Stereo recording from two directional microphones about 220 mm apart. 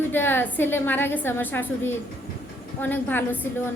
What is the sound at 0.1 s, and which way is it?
A woman's voice, 10° left (ahead or behind).